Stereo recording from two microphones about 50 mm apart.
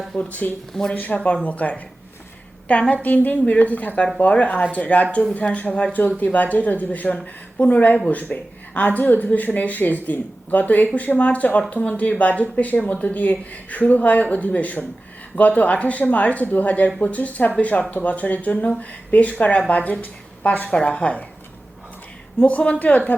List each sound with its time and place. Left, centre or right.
0.2 s speech: left
0.7 s speech: centre
0.9 s a woman's voice: left
22.4 s a woman's voice: left